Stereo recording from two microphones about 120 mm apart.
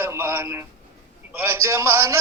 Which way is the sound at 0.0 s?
20° right (ahead or behind).